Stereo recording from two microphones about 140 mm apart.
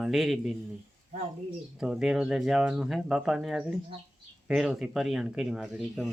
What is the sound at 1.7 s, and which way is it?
Speech, 5° right (ahead or behind).